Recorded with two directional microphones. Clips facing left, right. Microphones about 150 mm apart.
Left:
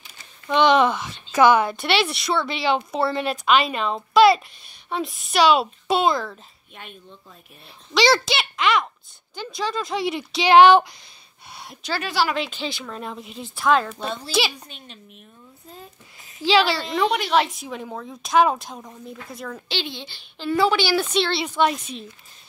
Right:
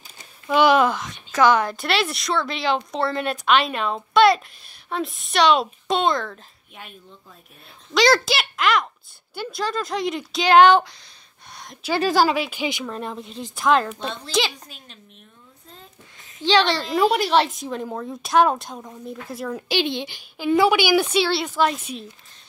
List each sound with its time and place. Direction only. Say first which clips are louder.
0.5 s a woman's voice: even; 5° right (ahead or behind); by 11.0 s 10° left (ahead or behind)
11.5 s a sound: left 1 dB; 5° left (ahead or behind)
12.0 s speech: right 6 dB; 45° right (ahead or behind)
12.4 s a woman's voice: right 3 dB; 10° right (ahead or behind)
12.9 s a woman's voice: right 2 dB; centre (ahead or behind)
15.7 s a sound: left 3 dB; 5° left (ahead or behind)
17.5 s a woman's voice: right 4 dB; centre (ahead or behind)